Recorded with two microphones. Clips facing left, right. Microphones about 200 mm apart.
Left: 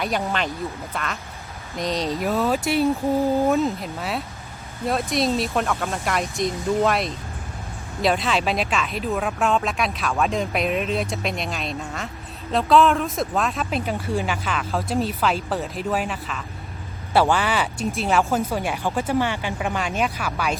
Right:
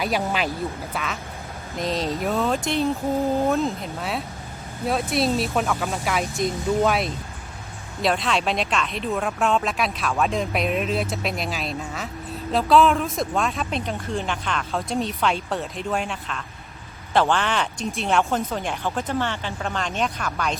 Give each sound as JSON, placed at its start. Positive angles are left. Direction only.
{"t": 0.0, "sound": "speech", "side_deg": -5}